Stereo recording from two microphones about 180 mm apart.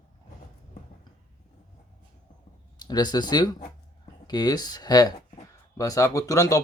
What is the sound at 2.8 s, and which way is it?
Speech, 20° left (ahead or behind).